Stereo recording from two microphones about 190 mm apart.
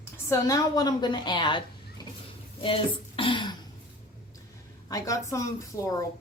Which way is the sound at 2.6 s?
30° left (ahead or behind).